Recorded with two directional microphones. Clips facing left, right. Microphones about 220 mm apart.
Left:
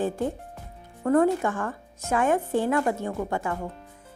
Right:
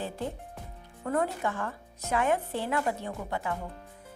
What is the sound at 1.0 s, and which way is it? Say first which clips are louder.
Speech: left 9 dB; 50° left (ahead or behind).